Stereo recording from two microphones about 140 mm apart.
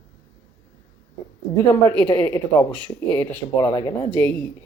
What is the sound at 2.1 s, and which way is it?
Speech, 15° left (ahead or behind).